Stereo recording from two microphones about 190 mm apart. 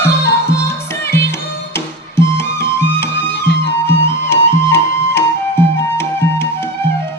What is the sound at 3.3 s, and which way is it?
Music, 60° left (ahead or behind).